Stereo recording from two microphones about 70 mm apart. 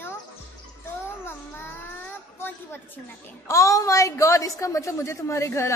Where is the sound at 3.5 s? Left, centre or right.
Left.